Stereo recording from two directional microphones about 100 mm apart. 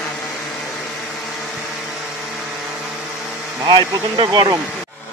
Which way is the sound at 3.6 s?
45° right (ahead or behind).